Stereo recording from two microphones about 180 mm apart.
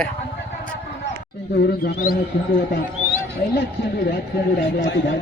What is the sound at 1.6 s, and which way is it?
Speech, 60° left (ahead or behind).